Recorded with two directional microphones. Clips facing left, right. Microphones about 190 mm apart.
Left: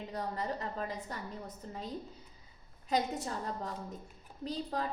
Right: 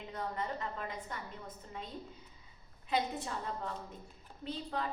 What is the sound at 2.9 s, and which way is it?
A woman's voice, 40° left (ahead or behind).